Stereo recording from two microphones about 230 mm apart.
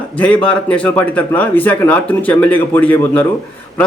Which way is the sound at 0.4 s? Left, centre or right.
Centre.